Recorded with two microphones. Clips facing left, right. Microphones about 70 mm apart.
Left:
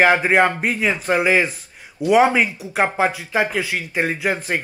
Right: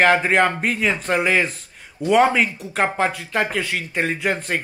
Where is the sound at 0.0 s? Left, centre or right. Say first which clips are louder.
Left 1 dB; centre.